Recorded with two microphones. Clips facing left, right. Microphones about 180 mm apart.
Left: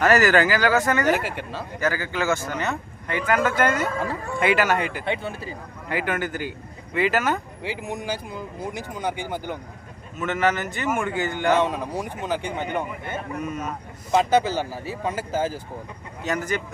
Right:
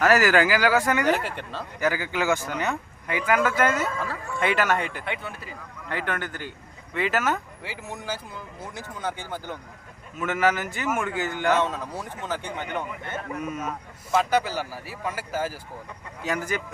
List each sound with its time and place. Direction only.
0.0 s speech: 5° right (ahead or behind)
1.0 s a man's voice: 5° left (ahead or behind)
1.8 s a man's voice: 15° right (ahead or behind); by 5.0 s centre (ahead or behind)
5.0 s speech: 30° left (ahead or behind)
5.9 s a man's voice: 10° left (ahead or behind)
7.6 s speech: 15° left (ahead or behind)
10.2 s a man's voice: 10° right (ahead or behind)
11.5 s speech: 15° left (ahead or behind)
13.3 s a man's voice: 5° right (ahead or behind)
14.1 s speech: 25° left (ahead or behind)
16.2 s speech: 10° right (ahead or behind)